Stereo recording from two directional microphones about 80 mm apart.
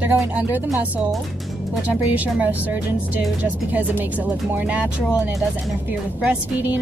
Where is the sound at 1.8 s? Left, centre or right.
Centre.